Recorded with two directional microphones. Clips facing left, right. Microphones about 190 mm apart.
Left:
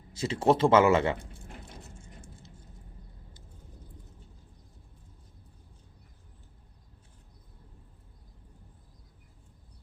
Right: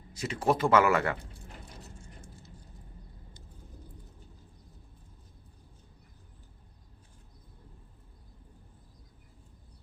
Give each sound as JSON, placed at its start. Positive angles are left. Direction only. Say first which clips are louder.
{"t": 0.1, "sound": "speech", "louder": "left 4 dB", "side_deg": 25}
{"t": 2.0, "sound": "vehicle", "louder": "even", "side_deg": 25}